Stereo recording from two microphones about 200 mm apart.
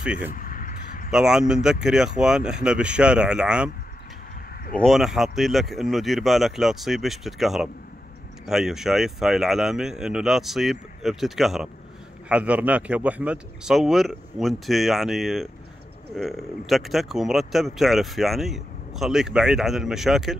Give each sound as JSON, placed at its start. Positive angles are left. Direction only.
{"t": 0.0, "sound": "speech", "side_deg": -5}
{"t": 0.3, "sound": "a sound", "side_deg": 45}
{"t": 1.1, "sound": "speech", "side_deg": -5}
{"t": 4.8, "sound": "speech", "side_deg": 0}